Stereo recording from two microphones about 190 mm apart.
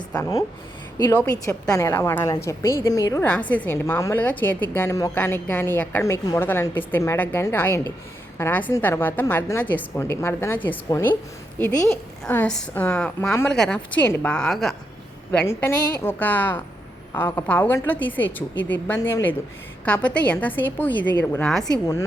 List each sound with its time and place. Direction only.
0.1 s a woman's voice: 15° left (ahead or behind)
15.3 s a woman's voice: 15° left (ahead or behind)